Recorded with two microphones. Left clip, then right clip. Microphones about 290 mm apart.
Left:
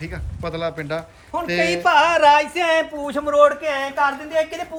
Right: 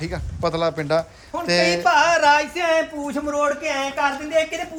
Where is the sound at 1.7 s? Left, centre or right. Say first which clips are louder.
Left 3 dB; left.